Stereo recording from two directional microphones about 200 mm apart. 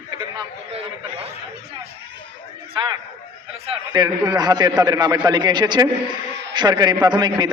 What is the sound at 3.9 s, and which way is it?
A man's voice, 20° right (ahead or behind).